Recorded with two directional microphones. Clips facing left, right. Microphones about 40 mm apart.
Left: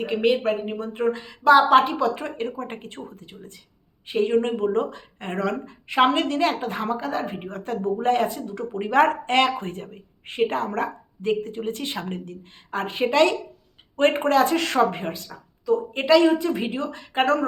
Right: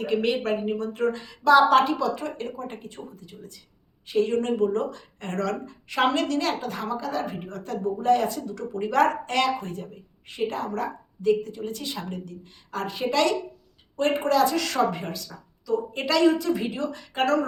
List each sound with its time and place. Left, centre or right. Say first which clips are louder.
0.0 s speech: left 3 dB; centre; by 3.5 s left
4.1 s speech: left 2 dB; left
8.3 s speech: left 1 dB; left
13.9 s speech: left 3 dB; left